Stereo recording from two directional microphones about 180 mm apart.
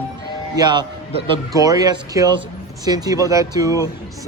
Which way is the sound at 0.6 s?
25° right (ahead or behind).